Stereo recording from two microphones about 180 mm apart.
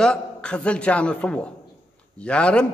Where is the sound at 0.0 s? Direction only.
5° left (ahead or behind).